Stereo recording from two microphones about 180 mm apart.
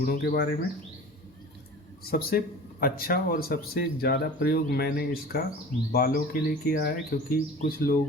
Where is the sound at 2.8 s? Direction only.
55° left (ahead or behind).